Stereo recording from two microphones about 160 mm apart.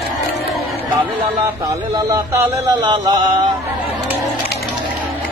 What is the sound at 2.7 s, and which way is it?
Speech, 30° right (ahead or behind).